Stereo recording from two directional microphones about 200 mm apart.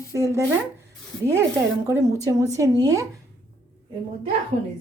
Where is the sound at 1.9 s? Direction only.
15° right (ahead or behind).